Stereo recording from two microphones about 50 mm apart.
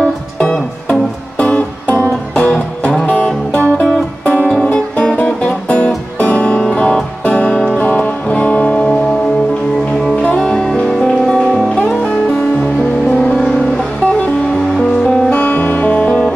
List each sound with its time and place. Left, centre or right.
0.4 s music: left
4.6 s music: left
10.1 s music: left
10.4 s music: centre
15.2 s music: left
15.5 s music: left